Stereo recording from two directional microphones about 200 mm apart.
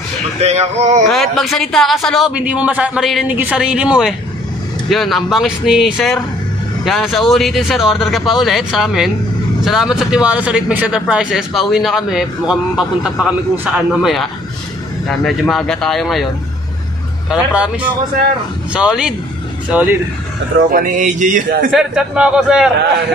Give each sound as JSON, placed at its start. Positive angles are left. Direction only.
{"t": 0.4, "sound": "speech", "side_deg": -35}
{"t": 1.1, "sound": "a man's voice", "side_deg": 0}
{"t": 17.3, "sound": "a man's voice", "side_deg": -5}
{"t": 20.7, "sound": "speech", "side_deg": -40}
{"t": 21.7, "sound": "a man's voice", "side_deg": -5}